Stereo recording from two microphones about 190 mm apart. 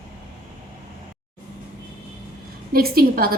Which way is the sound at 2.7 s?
50° right (ahead or behind).